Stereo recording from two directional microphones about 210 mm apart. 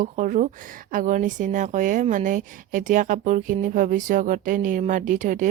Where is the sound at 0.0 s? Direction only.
40° right (ahead or behind).